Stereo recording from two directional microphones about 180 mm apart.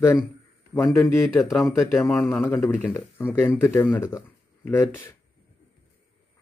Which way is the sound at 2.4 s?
15° left (ahead or behind).